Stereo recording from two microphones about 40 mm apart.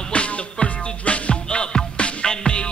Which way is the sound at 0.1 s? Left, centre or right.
Left.